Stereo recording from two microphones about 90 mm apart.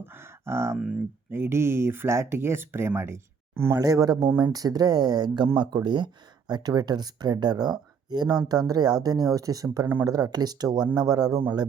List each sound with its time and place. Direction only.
0.0 s a sound: 25° right (ahead or behind)
0.8 s speech: 5° right (ahead or behind)
1.3 s speech: 25° right (ahead or behind)
3.8 s speech: 45° right (ahead or behind)